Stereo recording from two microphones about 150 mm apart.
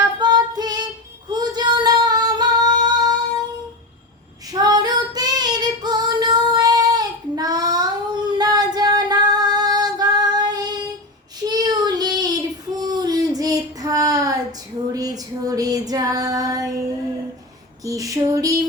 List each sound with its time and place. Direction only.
0.2 s female singing: 30° right (ahead or behind)
1.3 s singing: 30° right (ahead or behind)
4.5 s female singing: 25° right (ahead or behind)
11.4 s child singing: 25° right (ahead or behind)
14.9 s female singing: 25° right (ahead or behind)
17.8 s female singing: 20° right (ahead or behind)